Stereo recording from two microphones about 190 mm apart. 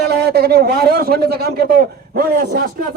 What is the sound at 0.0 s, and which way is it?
A man's voice, 60° right (ahead or behind).